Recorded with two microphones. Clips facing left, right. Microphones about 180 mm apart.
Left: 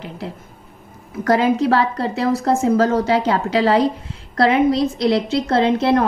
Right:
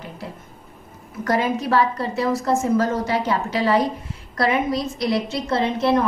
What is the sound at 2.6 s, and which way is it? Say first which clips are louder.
A woman's voice: left 4 dB; 70° left (ahead or behind).